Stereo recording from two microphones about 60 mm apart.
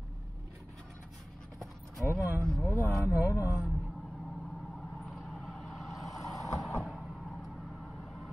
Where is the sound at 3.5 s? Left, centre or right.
Centre.